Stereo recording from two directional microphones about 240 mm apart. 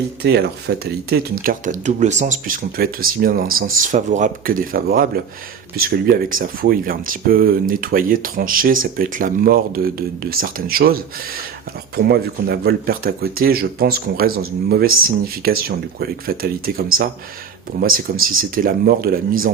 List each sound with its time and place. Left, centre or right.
0.2 s speech: right